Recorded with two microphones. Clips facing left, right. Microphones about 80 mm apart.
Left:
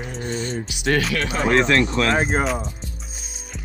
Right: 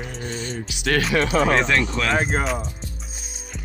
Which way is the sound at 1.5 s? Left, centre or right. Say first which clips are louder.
Left 3 dB; centre.